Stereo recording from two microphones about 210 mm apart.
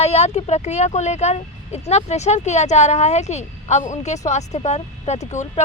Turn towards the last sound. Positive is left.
turn(degrees=35)  # may be behind; listen again after turning